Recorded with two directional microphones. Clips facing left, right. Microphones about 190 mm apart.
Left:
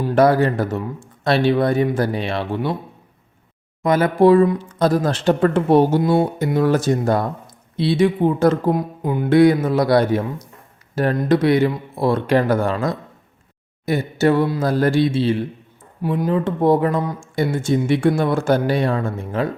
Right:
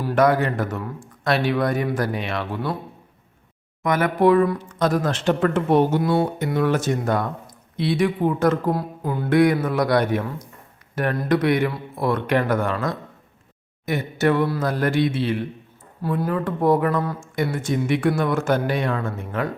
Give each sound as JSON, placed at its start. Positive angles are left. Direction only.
{"t": 0.1, "sound": "speech", "side_deg": 30}
{"t": 3.8, "sound": "speech", "side_deg": 30}
{"t": 6.0, "sound": "speech", "side_deg": 20}
{"t": 6.4, "sound": "speech", "side_deg": 35}
{"t": 8.8, "sound": "speech", "side_deg": 15}
{"t": 16.0, "sound": "speech", "side_deg": 15}